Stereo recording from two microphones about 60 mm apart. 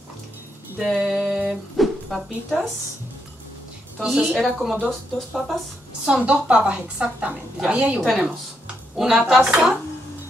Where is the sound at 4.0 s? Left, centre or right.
Centre.